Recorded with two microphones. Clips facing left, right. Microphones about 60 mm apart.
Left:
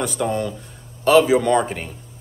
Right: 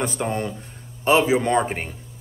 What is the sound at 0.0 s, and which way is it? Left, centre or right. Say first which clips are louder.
A man's voice: left 2 dB; right.